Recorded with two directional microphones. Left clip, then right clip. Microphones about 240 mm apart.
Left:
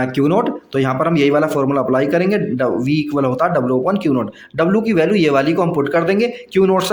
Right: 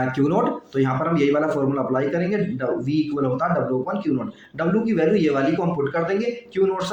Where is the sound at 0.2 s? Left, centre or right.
Left.